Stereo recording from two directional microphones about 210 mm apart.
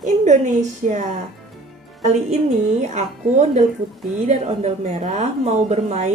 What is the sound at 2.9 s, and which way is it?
A woman's voice, 35° right (ahead or behind).